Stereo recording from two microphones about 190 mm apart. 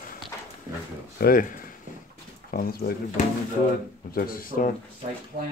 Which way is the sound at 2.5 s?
45° left (ahead or behind).